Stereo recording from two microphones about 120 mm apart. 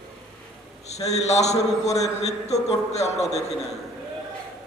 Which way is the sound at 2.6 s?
65° left (ahead or behind).